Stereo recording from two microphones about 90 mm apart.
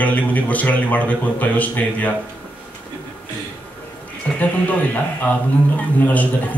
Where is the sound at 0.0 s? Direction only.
15° left (ahead or behind).